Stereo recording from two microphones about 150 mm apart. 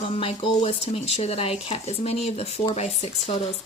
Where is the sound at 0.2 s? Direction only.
40° left (ahead or behind).